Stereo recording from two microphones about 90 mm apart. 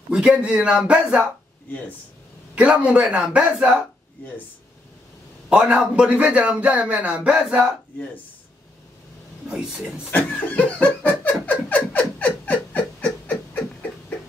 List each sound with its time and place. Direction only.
0.1 s speech: 15° right (ahead or behind)
2.5 s speech: 15° right (ahead or behind)
5.5 s speech: 10° right (ahead or behind)
9.5 s speech: 10° right (ahead or behind)
10.1 s snicker: 20° left (ahead or behind)
11.4 s a sound: 20° left (ahead or behind)